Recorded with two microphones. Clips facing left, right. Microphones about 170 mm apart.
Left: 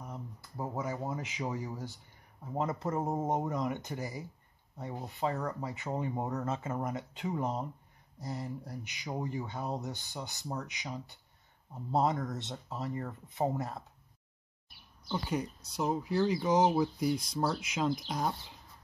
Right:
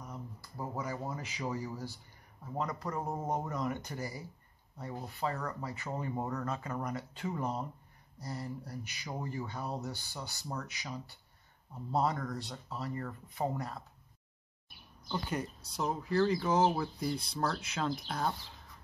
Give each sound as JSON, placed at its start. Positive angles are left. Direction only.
{"t": 0.0, "sound": "a sound", "side_deg": 20}
{"t": 2.5, "sound": "speech", "side_deg": 25}
{"t": 15.0, "sound": "speech", "side_deg": 5}